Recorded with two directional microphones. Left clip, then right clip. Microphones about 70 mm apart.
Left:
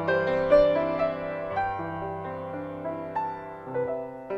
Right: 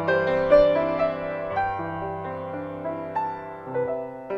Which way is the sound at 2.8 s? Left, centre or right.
Right.